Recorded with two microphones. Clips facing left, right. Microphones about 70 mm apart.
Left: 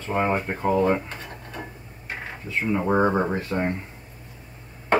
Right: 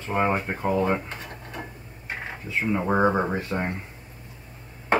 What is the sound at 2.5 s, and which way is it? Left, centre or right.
Speech, centre.